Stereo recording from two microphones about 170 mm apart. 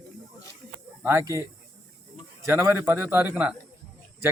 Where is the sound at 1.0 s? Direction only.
15° right (ahead or behind).